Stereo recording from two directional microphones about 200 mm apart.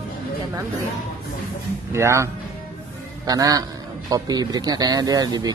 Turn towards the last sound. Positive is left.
turn(degrees=-20)  # may be behind; listen again after turning